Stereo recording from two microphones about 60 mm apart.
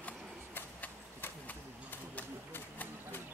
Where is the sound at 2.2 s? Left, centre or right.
Left.